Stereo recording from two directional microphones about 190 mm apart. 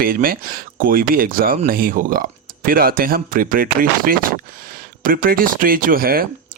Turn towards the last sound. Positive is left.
turn(degrees=-50)  # may be behind; listen again after turning